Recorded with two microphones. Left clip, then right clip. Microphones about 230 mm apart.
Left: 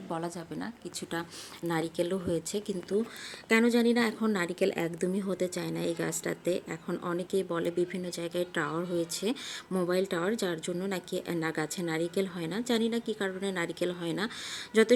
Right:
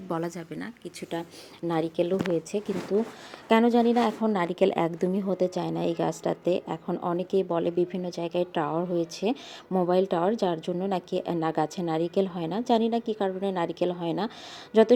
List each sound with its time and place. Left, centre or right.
0.1 s a woman's voice: centre
1.6 s speech: centre
3.5 s a woman's voice: centre